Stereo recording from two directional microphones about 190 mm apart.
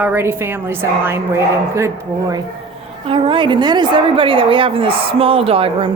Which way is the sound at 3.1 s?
25° right (ahead or behind).